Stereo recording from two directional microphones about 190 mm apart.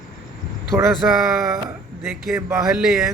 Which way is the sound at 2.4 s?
10° right (ahead or behind).